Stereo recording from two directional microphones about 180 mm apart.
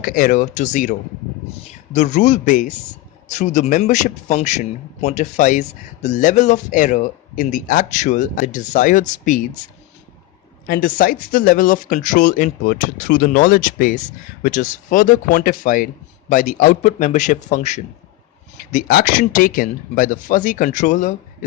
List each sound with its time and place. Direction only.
0.0 s a man's voice: 50° left (ahead or behind)
10.7 s a man's voice: 50° left (ahead or behind)